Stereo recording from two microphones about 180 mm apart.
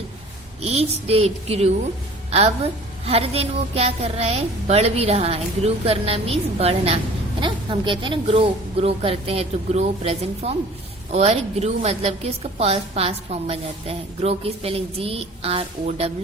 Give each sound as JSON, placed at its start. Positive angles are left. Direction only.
{"t": 0.6, "sound": "a woman's voice", "side_deg": -35}
{"t": 3.1, "sound": "a woman's voice", "side_deg": -35}